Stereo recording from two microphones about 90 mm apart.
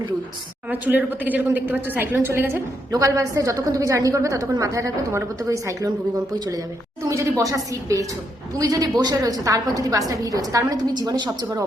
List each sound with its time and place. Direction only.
0.7 s speech: 20° right (ahead or behind)
2.9 s a woman's voice: 35° right (ahead or behind)
7.1 s a woman's voice: 35° right (ahead or behind)